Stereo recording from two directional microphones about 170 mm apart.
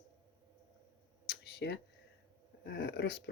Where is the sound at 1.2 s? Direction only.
75° left (ahead or behind).